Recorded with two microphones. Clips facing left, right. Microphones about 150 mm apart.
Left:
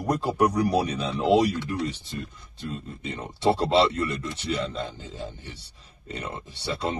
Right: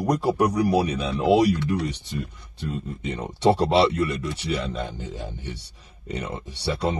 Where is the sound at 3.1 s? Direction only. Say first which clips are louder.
Right 3 dB; 15° right (ahead or behind).